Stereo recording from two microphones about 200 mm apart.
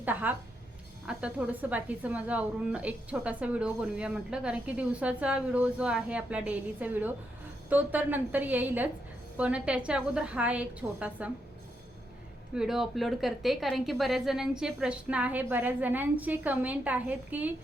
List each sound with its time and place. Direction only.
0.0 s a woman's voice: 10° right (ahead or behind)
12.5 s a woman's voice: centre (ahead or behind)